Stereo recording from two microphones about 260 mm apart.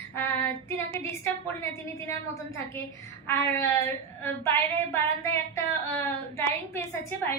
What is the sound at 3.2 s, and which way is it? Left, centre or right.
Speech, centre.